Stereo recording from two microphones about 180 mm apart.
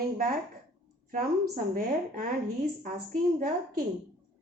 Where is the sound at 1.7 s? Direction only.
55° right (ahead or behind).